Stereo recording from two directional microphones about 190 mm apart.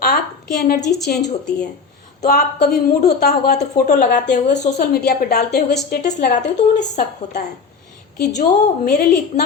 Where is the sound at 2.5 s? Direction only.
60° left (ahead or behind).